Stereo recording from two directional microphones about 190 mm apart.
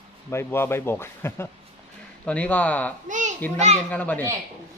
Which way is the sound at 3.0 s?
40° right (ahead or behind).